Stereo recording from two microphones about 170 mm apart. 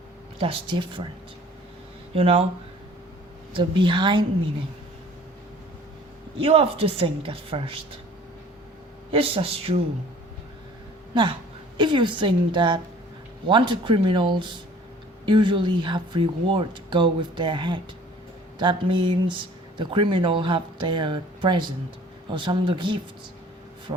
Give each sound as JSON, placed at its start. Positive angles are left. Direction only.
{"t": 0.3, "sound": "a woman's voice", "side_deg": -30}
{"t": 2.1, "sound": "a woman's voice", "side_deg": -35}
{"t": 3.5, "sound": "speech", "side_deg": -30}
{"t": 6.4, "sound": "a woman's voice", "side_deg": -35}
{"t": 9.1, "sound": "a woman's voice", "side_deg": -35}
{"t": 11.1, "sound": "speech", "side_deg": -25}